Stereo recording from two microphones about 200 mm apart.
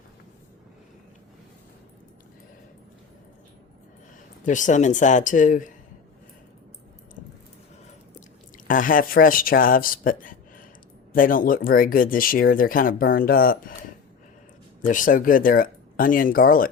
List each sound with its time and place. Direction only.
4.4 s speech: 40° left (ahead or behind)
8.5 s speech: 40° left (ahead or behind)
14.8 s speech: 40° left (ahead or behind)